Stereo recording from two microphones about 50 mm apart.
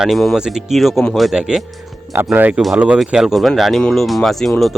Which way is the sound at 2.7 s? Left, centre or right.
Right.